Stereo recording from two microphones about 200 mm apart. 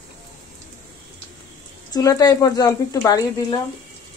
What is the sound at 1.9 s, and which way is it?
Speech, 20° left (ahead or behind).